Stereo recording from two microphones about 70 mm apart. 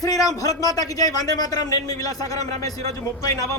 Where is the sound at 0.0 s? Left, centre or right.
Left.